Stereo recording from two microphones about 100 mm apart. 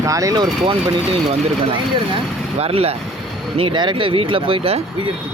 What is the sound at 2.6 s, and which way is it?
Speech, 85° right.